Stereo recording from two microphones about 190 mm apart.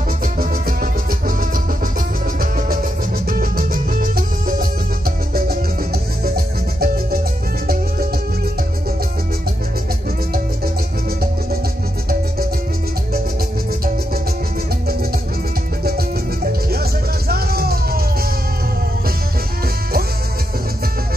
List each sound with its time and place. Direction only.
0.2 s music: 50° right (ahead or behind)
3.3 s music: 50° right (ahead or behind)
17.3 s music: 55° right (ahead or behind)